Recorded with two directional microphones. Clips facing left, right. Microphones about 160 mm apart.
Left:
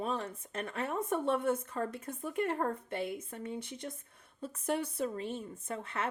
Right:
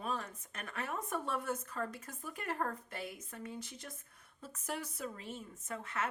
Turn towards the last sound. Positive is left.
turn(degrees=30)  # may be behind; listen again after turning